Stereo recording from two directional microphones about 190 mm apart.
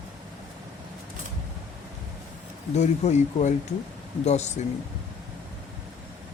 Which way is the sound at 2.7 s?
35° left (ahead or behind).